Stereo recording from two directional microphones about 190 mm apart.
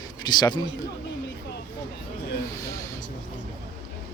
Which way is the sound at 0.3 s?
20° left (ahead or behind).